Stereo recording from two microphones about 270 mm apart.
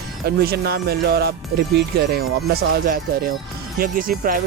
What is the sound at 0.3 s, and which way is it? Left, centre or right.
Speech, right.